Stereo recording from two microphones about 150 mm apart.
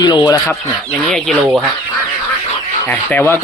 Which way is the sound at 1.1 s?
Centre (ahead or behind).